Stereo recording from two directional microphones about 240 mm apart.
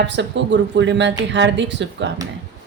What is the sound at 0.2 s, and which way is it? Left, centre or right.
A woman's voice, right.